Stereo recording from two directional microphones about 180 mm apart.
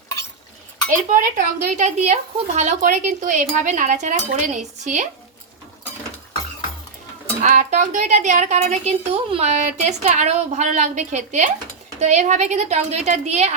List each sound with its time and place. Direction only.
0.9 s speech: 45° right (ahead or behind)
7.4 s a woman's voice: 40° right (ahead or behind)